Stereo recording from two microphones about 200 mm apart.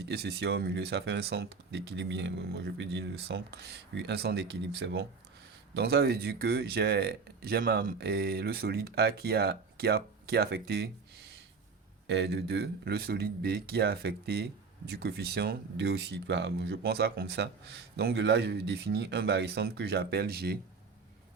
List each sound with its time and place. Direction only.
0.0 s speech: 55° right (ahead or behind)
12.0 s speech: 60° right (ahead or behind)